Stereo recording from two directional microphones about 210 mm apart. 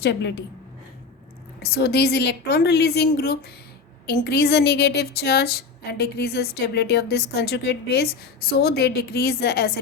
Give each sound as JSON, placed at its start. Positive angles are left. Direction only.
{"t": 0.0, "sound": "a woman's voice", "side_deg": 55}
{"t": 1.6, "sound": "a woman's voice", "side_deg": 50}